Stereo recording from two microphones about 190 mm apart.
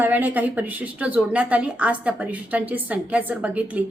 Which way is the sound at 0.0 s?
10° right (ahead or behind).